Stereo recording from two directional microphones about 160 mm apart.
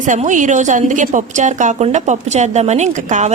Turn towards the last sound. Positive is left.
turn(degrees=-45)  # may be behind; listen again after turning